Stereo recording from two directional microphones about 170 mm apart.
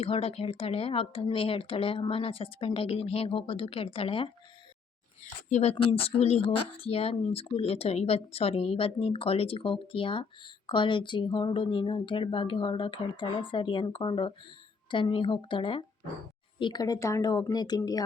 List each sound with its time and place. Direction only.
0.0 s speech: 35° left (ahead or behind)
5.5 s speech: 45° left (ahead or behind)
5.7 s speech: 35° left (ahead or behind)